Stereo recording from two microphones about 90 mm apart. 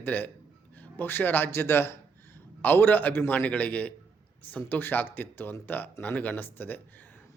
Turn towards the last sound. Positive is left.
turn(degrees=20)  # may be behind; listen again after turning